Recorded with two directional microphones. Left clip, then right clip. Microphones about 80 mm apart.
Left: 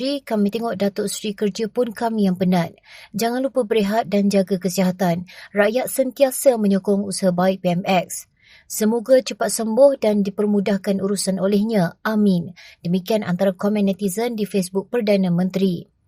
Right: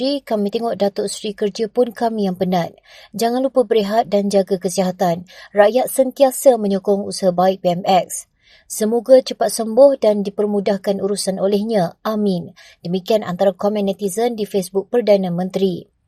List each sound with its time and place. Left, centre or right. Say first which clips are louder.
0.0 s a woman's voice: right 3 dB; right
8.8 s a woman's voice: right 4 dB; right